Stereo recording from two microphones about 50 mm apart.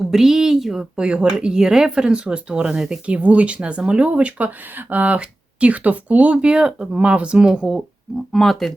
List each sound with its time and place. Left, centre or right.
0.1 s speech: centre
0.9 s speech: centre
3.2 s speech: right
8.3 s speech: centre